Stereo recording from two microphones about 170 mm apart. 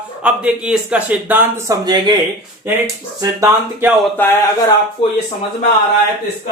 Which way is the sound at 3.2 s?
20° right (ahead or behind).